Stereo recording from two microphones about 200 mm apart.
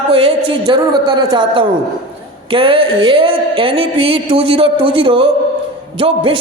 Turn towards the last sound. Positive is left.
turn(degrees=-25)  # may be behind; listen again after turning